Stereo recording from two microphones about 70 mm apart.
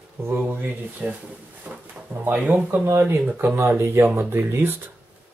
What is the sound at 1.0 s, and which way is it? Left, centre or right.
Speech, right.